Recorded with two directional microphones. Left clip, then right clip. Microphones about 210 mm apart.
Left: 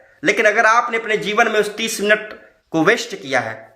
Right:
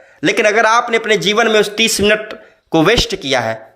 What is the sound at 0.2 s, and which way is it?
Speech, 40° right (ahead or behind).